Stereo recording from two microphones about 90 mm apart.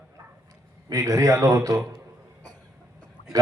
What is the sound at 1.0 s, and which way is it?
Speech, 35° right (ahead or behind).